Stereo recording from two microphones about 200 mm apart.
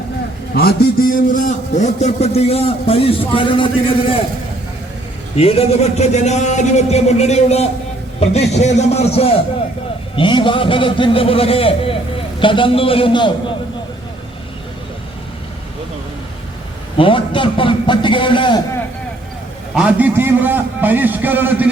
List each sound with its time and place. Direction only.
0.5 s a man's voice: 50° left (ahead or behind); by 3.7 s 25° left (ahead or behind)
5.4 s a man's voice: 30° left (ahead or behind)
17.0 s a man's voice: 25° left (ahead or behind)
19.7 s a man's voice: 5° right (ahead or behind)